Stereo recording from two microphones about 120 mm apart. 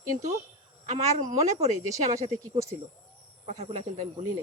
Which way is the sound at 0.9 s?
65° right (ahead or behind).